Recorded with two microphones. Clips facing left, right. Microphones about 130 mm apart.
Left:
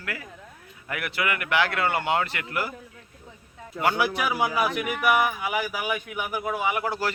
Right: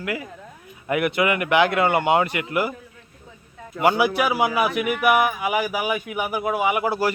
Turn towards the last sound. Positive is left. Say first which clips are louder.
# right 5 dB
turn(degrees=-10)  # may be behind; listen again after turning